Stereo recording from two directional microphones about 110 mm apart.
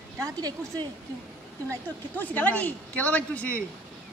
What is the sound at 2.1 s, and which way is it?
Speech, 15° left (ahead or behind).